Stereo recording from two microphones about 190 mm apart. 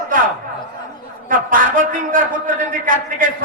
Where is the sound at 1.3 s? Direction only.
45° right (ahead or behind).